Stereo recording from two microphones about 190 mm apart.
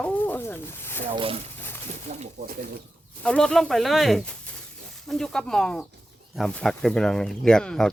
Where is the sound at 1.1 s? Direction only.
30° right (ahead or behind).